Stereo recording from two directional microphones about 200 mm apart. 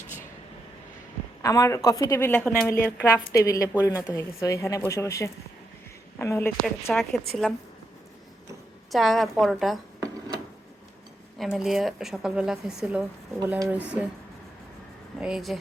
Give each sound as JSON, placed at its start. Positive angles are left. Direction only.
{"t": 1.4, "sound": "a woman's voice", "side_deg": 15}
{"t": 8.9, "sound": "speech", "side_deg": 0}
{"t": 10.0, "sound": "a sound", "side_deg": -20}
{"t": 11.3, "sound": "speech", "side_deg": 0}
{"t": 15.2, "sound": "speech", "side_deg": 0}